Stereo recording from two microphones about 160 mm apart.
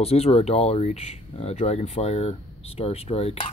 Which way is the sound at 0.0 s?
40° left (ahead or behind).